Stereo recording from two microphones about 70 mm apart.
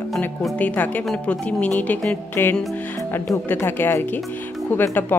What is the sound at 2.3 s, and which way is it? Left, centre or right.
Speech, left.